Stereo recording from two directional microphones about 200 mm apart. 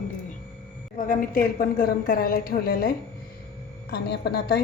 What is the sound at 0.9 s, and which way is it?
A woman's voice, 45° left (ahead or behind).